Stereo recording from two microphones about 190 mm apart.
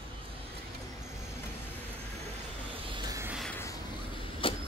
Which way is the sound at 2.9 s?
15° right (ahead or behind).